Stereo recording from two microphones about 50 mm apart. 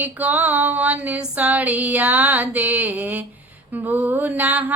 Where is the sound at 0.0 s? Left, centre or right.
Right.